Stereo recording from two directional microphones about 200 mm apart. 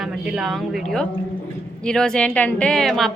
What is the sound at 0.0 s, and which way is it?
A woman's voice, centre (ahead or behind).